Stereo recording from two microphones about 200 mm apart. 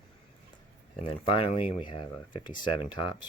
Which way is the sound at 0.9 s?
30° left (ahead or behind).